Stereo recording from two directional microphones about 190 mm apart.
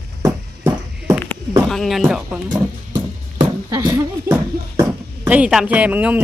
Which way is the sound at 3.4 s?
20° right (ahead or behind).